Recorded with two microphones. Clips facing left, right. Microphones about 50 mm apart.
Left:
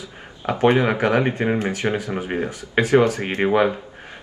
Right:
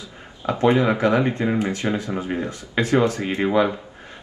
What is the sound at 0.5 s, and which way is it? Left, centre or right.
Speech, left.